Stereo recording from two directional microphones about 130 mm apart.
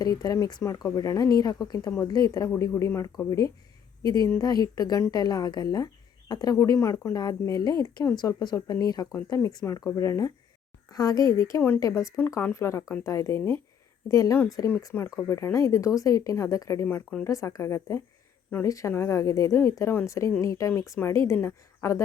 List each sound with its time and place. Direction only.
0.0 s speech: 30° left (ahead or behind)